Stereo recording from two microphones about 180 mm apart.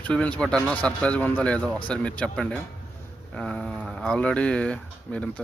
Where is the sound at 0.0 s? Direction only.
5° left (ahead or behind).